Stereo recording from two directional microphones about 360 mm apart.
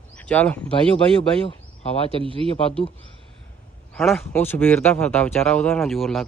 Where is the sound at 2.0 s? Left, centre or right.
Centre.